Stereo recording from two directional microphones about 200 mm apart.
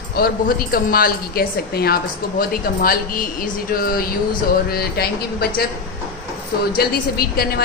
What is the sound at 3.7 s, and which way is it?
A woman's voice, 50° left (ahead or behind).